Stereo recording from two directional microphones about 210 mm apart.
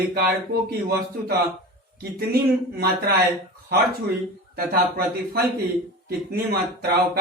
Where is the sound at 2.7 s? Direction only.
50° right (ahead or behind).